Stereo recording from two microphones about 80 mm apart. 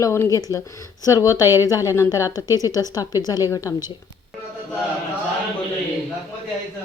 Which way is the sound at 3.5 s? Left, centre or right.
Left.